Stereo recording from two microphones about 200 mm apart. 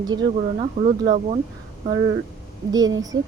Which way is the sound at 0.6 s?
25° right (ahead or behind).